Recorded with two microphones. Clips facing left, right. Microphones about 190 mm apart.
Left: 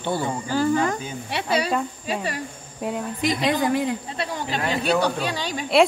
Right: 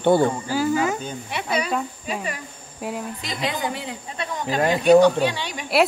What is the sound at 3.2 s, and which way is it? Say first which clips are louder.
Speech: left 5 dB; 50° left (ahead or behind).